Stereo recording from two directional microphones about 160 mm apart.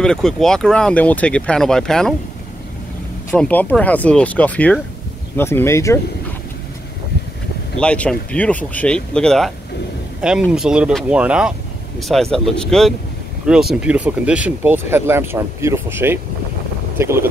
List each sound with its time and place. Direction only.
0.0 s speech: 5° left (ahead or behind)
3.3 s speech: 10° left (ahead or behind)
7.8 s speech: 5° left (ahead or behind); by 17.3 s 15° right (ahead or behind)